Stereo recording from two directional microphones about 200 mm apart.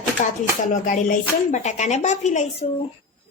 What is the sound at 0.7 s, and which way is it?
Speech, 40° left (ahead or behind).